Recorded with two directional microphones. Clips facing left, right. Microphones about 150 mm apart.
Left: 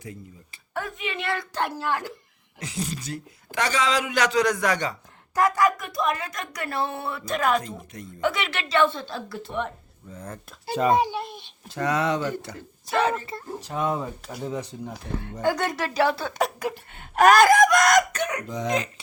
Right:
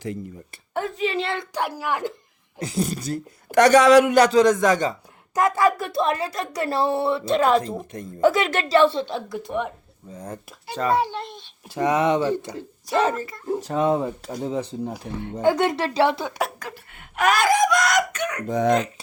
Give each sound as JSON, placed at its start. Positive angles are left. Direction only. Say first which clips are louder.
{"t": 0.7, "sound": "a woman's voice", "louder": "right 7 dB", "side_deg": -25}
{"t": 1.5, "sound": "speech", "louder": "right 2 dB", "side_deg": -10}
{"t": 2.6, "sound": "a woman's voice", "louder": "right 6 dB", "side_deg": -35}
{"t": 3.5, "sound": "speech", "louder": "right 12 dB", "side_deg": -60}
{"t": 4.2, "sound": "speech", "louder": "right 6 dB", "side_deg": -30}
{"t": 8.2, "sound": "a woman's voice", "louder": "right 7 dB", "side_deg": -40}
{"t": 10.8, "sound": "a child's voice", "louder": "left 1 dB", "side_deg": 15}
{"t": 11.7, "sound": "speech", "louder": "right 4 dB", "side_deg": -20}
{"t": 13.3, "sound": "speech", "louder": "left 6 dB", "side_deg": 25}
{"t": 13.7, "sound": "speech", "louder": "right 5 dB", "side_deg": -30}
{"t": 16.6, "sound": "speech", "louder": "left 7 dB", "side_deg": 15}
{"t": 16.9, "sound": "speech", "louder": "left 5 dB", "side_deg": 35}
{"t": 18.4, "sound": "speech", "louder": "right 11 dB", "side_deg": -60}